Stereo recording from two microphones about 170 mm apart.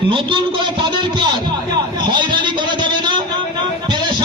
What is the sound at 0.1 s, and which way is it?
A man's voice, 30° right (ahead or behind).